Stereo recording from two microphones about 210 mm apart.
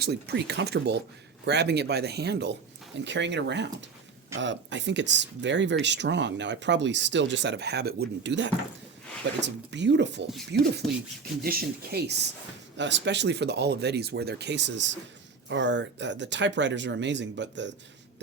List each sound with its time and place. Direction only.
0.0 s speech: 50° right (ahead or behind)